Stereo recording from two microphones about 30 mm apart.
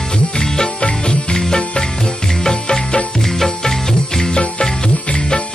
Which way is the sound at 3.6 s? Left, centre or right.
Centre.